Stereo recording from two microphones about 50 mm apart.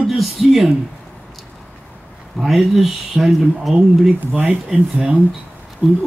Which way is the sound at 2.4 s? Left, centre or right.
Centre.